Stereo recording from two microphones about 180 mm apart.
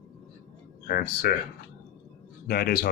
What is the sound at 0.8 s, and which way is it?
Speech, 50° left (ahead or behind).